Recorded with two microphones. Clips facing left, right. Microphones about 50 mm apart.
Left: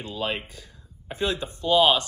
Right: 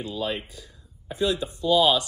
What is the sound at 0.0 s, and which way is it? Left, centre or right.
Speech, left.